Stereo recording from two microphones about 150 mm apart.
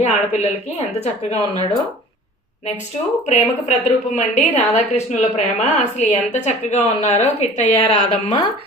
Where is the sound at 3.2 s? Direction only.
50° left (ahead or behind).